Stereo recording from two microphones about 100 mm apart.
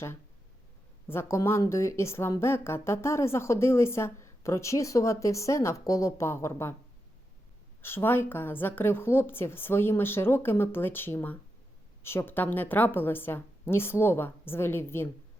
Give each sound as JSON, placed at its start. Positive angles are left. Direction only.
{"t": 1.0, "sound": "speech", "side_deg": 25}
{"t": 7.8, "sound": "speech", "side_deg": 25}